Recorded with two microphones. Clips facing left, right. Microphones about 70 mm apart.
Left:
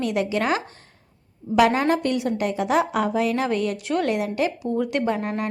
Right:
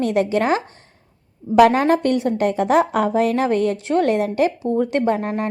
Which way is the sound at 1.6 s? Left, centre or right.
Right.